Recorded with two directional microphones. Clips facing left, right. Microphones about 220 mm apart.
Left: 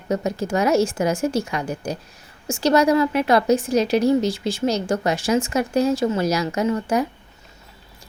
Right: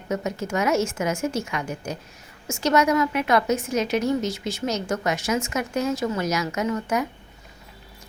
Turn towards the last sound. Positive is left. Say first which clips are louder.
# left 4 dB
turn(degrees=30)  # may be behind; listen again after turning